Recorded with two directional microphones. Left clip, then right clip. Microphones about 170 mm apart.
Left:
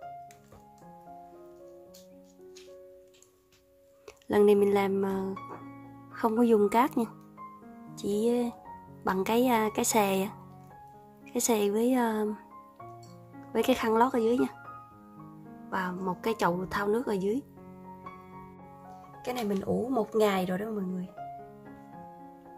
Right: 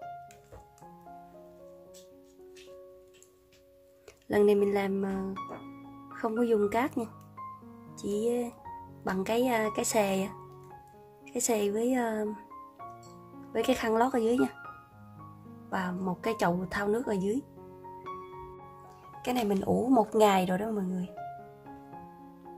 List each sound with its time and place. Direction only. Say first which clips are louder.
4.3 s speech: left 2 dB; 15° left (ahead or behind)
7.9 s music: left 2 dB; 20° left (ahead or behind)
9.0 s speech: left 2 dB; 20° left (ahead or behind)
11.3 s speech: left 2 dB; 20° left (ahead or behind)
13.5 s a woman's voice: left 2 dB; 20° left (ahead or behind)
15.7 s a woman's voice: left 1 dB; 15° left (ahead or behind)
19.2 s speech: right 2 dB; centre (ahead or behind)